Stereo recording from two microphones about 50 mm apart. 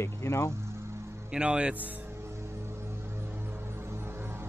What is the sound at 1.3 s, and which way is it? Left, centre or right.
Speech, right.